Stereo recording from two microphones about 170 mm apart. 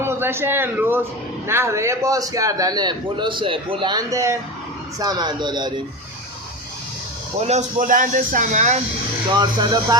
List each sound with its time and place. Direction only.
0.0 s a man's voice: 15° right (ahead or behind)
7.3 s speech: 40° right (ahead or behind)
9.4 s a man's voice: 25° right (ahead or behind)